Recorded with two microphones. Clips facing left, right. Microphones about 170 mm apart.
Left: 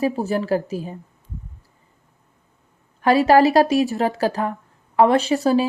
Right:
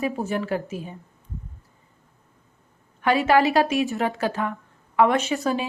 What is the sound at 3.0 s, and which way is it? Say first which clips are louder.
Speech: left 5 dB; 35° left (ahead or behind).